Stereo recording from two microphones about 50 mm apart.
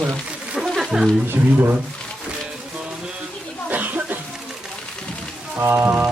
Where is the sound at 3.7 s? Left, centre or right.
Right.